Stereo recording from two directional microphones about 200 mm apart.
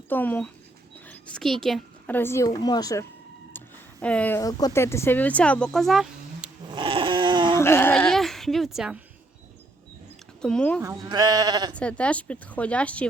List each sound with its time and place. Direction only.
0.1 s speech: 10° left (ahead or behind)
0.9 s dog: 10° left (ahead or behind)
1.6 s speech: 5° left (ahead or behind)
4.0 s speech: 5° left (ahead or behind)
4.4 s speech: 20° left (ahead or behind); by 6.5 s centre (ahead or behind)
6.7 s a sound: 25° right (ahead or behind)
7.5 s speech: 10° left (ahead or behind)
10.4 s speech: 5° left (ahead or behind)
10.8 s speech: 20° right (ahead or behind)
11.7 s speech: 5° left (ahead or behind)